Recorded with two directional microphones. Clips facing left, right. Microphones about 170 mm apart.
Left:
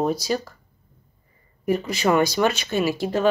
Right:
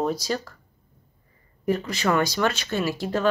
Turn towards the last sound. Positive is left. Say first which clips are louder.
# left 3 dB
turn(degrees=15)  # may be behind; listen again after turning